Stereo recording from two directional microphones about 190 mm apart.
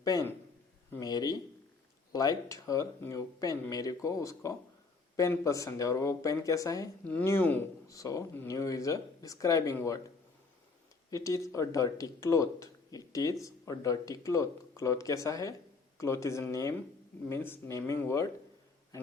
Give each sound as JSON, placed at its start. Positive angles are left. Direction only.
{"t": 0.0, "sound": "a man's voice", "side_deg": 15}
{"t": 11.1, "sound": "speech", "side_deg": 15}